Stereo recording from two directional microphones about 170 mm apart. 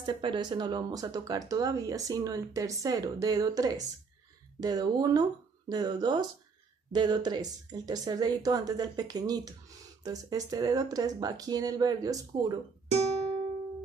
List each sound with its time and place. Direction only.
0.0 s speech: 25° right (ahead or behind)
12.9 s music: 40° right (ahead or behind)